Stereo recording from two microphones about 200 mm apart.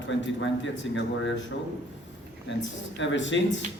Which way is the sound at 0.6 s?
65° left (ahead or behind).